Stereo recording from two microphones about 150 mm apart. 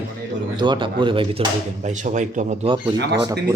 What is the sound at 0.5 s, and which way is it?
Speech, 30° right (ahead or behind).